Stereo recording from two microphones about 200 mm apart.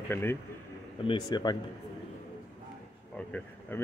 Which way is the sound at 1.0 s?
25° left (ahead or behind).